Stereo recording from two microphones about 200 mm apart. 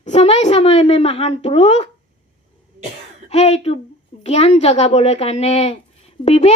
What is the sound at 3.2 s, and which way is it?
A woman's voice, 30° left (ahead or behind).